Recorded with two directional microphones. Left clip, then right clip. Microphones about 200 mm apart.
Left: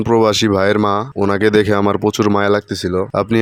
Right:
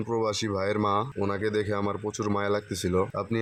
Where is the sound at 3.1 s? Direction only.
45° left (ahead or behind).